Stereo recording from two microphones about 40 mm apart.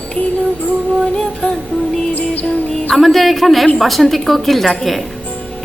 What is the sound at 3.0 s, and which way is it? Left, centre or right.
Music, centre.